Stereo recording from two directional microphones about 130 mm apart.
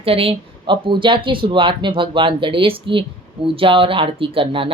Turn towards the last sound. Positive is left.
turn(degrees=-45)  # may be behind; listen again after turning